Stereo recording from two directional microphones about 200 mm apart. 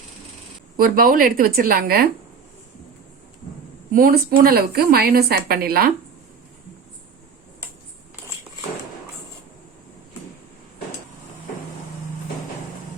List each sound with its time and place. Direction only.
0.8 s a woman's voice: 45° right (ahead or behind)
3.9 s a woman's voice: 45° right (ahead or behind)